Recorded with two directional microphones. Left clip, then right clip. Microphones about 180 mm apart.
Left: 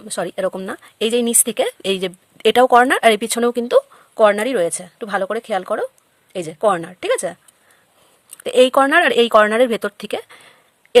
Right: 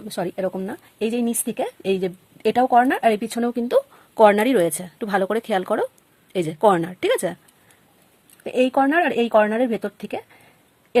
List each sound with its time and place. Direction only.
0.0 s speech: 25° left (ahead or behind)
4.1 s speech: 10° left (ahead or behind)
8.4 s speech: 40° left (ahead or behind)